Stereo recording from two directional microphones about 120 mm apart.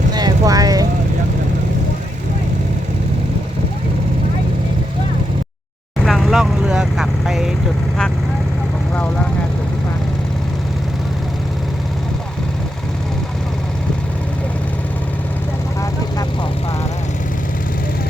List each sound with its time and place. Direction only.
0.1 s vehicle: 35° right (ahead or behind)
6.1 s vehicle: centre (ahead or behind)